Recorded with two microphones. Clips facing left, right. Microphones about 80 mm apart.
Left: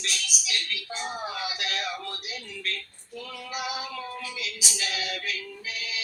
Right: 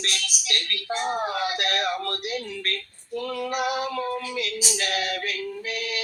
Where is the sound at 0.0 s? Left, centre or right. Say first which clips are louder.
Right 3 dB; right.